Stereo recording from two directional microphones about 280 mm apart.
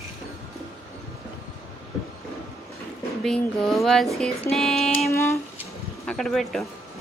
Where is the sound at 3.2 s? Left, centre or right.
Centre.